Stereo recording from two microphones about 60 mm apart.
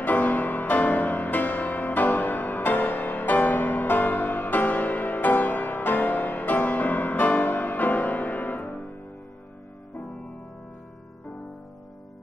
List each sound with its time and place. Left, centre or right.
0.0 s music: left